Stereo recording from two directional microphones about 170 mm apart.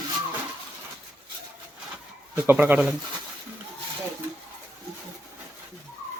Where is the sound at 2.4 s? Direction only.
10° right (ahead or behind).